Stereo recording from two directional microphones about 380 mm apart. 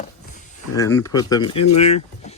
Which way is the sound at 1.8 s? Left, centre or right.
Centre.